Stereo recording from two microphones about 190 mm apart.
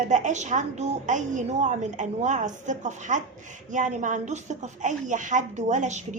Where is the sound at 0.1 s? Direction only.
40° right (ahead or behind).